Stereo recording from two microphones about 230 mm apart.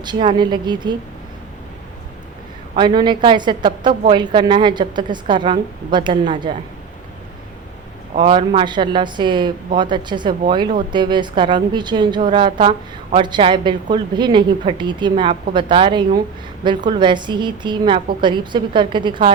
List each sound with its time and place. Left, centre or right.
0.0 s a woman's voice: centre
2.7 s a woman's voice: centre
8.1 s a woman's voice: right